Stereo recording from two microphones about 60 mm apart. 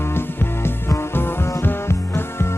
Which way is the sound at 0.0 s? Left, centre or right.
Left.